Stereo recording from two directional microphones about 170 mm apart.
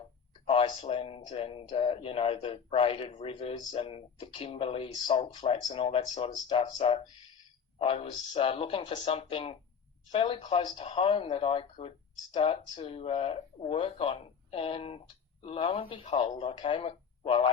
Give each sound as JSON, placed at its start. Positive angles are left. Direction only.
{"t": 0.4, "sound": "speech", "side_deg": 30}